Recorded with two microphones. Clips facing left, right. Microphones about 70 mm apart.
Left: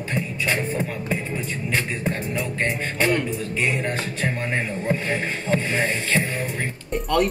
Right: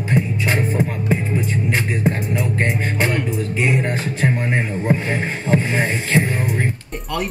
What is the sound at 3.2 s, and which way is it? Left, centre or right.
Speech, centre.